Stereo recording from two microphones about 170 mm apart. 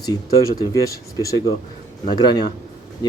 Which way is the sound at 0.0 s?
20° left (ahead or behind).